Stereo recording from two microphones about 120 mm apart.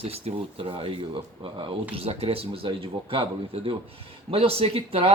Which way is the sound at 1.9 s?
55° right (ahead or behind).